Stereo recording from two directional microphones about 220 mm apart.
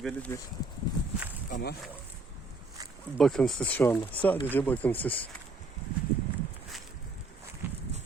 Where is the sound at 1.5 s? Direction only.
40° left (ahead or behind).